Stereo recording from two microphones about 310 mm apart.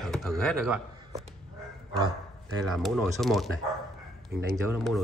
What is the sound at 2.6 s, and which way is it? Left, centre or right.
Speech, centre.